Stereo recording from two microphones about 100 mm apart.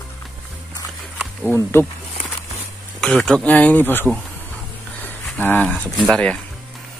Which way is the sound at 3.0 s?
5° left (ahead or behind).